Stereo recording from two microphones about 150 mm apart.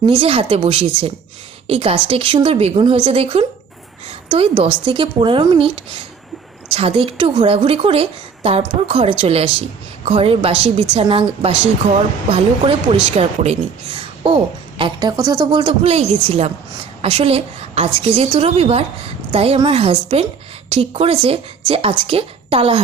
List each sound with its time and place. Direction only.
0.0 s a woman's voice: 35° right (ahead or behind)